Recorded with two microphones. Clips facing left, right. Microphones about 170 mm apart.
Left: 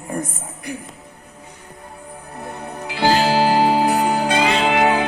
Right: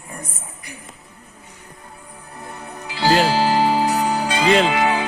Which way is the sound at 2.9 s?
55° left (ahead or behind).